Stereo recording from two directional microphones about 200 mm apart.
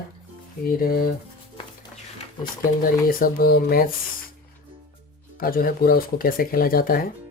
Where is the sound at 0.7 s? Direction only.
45° left (ahead or behind).